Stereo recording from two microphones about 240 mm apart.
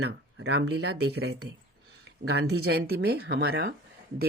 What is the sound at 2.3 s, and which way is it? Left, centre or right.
Speech, right.